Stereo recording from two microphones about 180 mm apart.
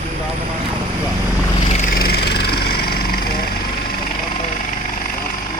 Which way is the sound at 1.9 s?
60° left (ahead or behind).